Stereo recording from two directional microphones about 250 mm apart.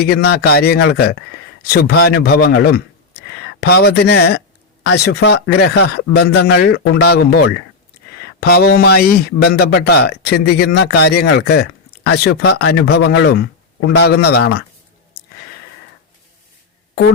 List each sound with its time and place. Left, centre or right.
0.0 s speech: left
16.9 s fart: left